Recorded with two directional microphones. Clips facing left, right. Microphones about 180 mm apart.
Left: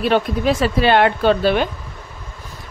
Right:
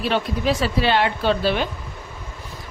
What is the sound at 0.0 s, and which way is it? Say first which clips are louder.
A woman's voice: left 5 dB; 50° left (ahead or behind).